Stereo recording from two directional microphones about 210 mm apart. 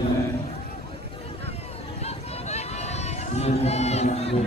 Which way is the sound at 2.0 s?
30° left (ahead or behind).